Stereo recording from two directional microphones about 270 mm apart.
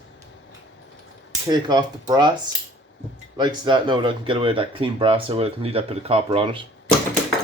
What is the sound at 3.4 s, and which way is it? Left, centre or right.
Speech, centre.